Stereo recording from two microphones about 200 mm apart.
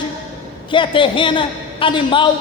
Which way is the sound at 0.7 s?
25° left (ahead or behind).